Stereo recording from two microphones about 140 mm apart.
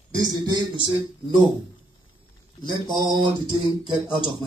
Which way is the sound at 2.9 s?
30° right (ahead or behind).